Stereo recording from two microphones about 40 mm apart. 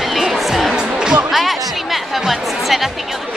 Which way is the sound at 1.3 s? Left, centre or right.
Centre.